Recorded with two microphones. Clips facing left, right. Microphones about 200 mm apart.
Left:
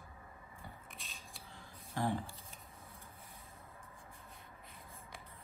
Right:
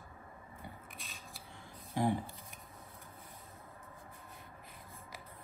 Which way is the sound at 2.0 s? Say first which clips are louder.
Right 4 dB; 15° right (ahead or behind).